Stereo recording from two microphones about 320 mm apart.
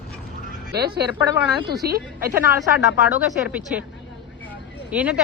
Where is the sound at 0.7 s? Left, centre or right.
Right.